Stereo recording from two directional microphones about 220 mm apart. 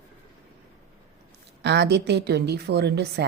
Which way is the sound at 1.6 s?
50° right (ahead or behind).